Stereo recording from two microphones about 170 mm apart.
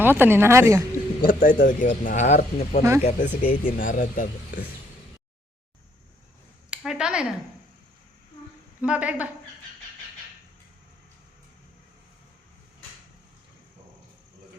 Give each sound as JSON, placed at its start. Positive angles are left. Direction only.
{"t": 0.0, "sound": "a woman's voice", "side_deg": -10}
{"t": 1.2, "sound": "speech", "side_deg": 55}
{"t": 2.0, "sound": "speech", "side_deg": 45}
{"t": 6.7, "sound": "speech", "side_deg": -5}
{"t": 8.8, "sound": "a woman's voice", "side_deg": -5}